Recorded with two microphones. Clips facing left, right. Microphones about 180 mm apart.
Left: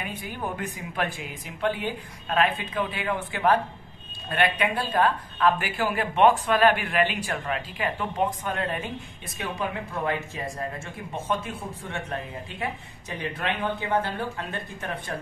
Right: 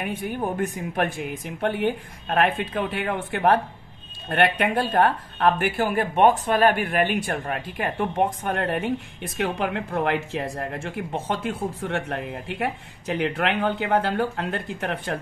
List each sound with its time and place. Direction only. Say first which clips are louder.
0.4 s speech: right 4 dB; 50° right (ahead or behind); by 15.1 s 75° right (ahead or behind)